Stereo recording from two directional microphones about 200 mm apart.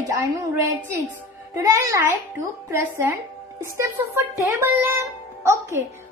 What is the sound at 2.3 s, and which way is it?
Speech, 10° right (ahead or behind).